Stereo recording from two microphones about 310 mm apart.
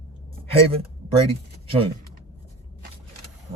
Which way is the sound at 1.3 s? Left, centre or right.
Centre.